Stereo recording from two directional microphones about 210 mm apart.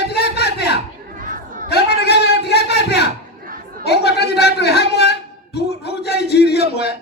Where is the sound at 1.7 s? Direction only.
50° left (ahead or behind).